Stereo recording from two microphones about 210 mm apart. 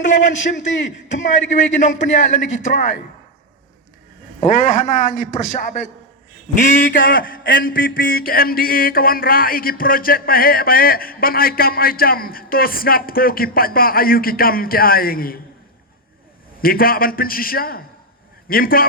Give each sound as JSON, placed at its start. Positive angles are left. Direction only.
{"t": 0.0, "sound": "a man's voice", "side_deg": 60}
{"t": 1.5, "sound": "a man's voice", "side_deg": 35}
{"t": 1.9, "sound": "a man's voice", "side_deg": 60}
{"t": 2.1, "sound": "a man's voice", "side_deg": 35}
{"t": 4.9, "sound": "a man's voice", "side_deg": 35}
{"t": 6.6, "sound": "a sound", "side_deg": 45}
{"t": 16.6, "sound": "a sound", "side_deg": 45}